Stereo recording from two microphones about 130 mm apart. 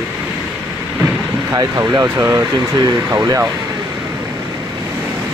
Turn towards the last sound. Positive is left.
turn(degrees=-20)  # may be behind; listen again after turning